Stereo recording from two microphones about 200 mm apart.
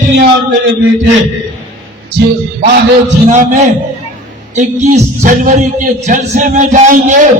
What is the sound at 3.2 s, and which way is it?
A man's voice, 40° right (ahead or behind).